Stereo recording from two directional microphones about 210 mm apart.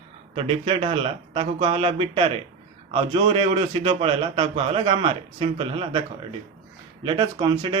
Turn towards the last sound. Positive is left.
turn(degrees=-20)  # may be behind; listen again after turning